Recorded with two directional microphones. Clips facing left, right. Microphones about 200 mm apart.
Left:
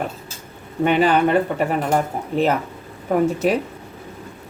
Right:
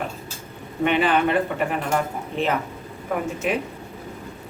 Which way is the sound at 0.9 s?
40° left (ahead or behind).